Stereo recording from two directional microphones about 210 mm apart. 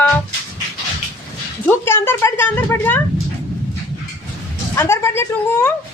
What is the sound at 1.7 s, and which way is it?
A woman's voice, 10° left (ahead or behind).